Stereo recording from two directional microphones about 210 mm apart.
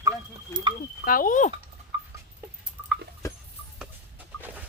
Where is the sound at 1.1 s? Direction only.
40° left (ahead or behind).